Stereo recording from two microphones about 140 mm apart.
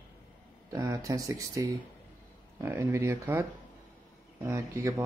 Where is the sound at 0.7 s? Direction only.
25° right (ahead or behind).